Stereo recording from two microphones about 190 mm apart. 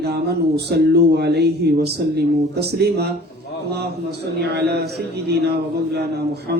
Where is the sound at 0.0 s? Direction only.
60° right (ahead or behind).